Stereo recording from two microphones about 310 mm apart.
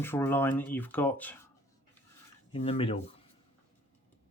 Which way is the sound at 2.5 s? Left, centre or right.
Centre.